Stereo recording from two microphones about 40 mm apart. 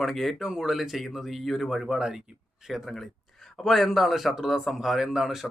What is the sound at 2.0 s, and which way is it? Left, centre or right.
Speech, centre.